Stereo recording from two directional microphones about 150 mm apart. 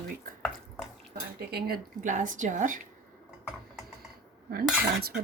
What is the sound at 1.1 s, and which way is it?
Speech, 90° right.